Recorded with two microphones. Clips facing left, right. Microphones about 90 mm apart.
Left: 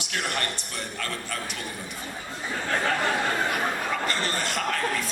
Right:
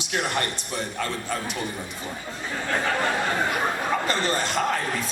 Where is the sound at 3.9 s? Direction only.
20° right (ahead or behind).